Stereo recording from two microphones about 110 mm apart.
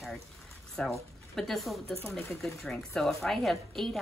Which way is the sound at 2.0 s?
20° left (ahead or behind).